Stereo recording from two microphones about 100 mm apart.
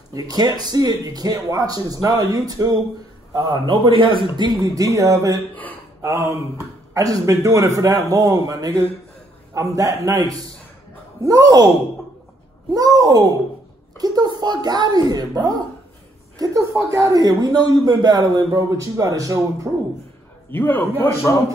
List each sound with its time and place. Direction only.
0.1 s speech: 40° right (ahead or behind)
3.4 s speech: 55° right (ahead or behind)
4.6 s speech: 35° right (ahead or behind)
12.7 s a woman's voice: 35° right (ahead or behind)
16.3 s speech: 30° right (ahead or behind)
20.5 s a man's voice: 20° left (ahead or behind)